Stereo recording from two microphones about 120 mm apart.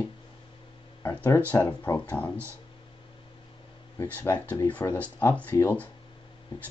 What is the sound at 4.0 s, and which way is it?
Speech, 15° left (ahead or behind).